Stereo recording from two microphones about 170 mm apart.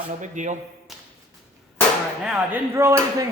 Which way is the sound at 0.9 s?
Centre (ahead or behind).